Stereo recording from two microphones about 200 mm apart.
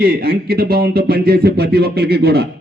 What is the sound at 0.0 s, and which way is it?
A man's voice, 50° right (ahead or behind).